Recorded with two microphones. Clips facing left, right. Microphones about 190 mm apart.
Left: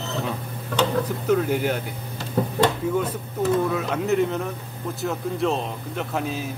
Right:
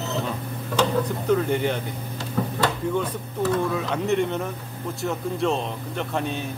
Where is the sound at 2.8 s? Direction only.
5° left (ahead or behind).